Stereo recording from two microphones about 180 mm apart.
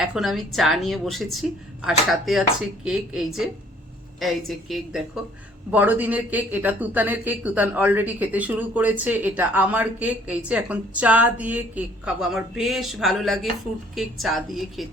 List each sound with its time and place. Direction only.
0.0 s a woman's voice: centre (ahead or behind)